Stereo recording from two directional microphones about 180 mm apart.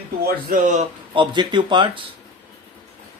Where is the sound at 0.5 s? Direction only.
45° right (ahead or behind).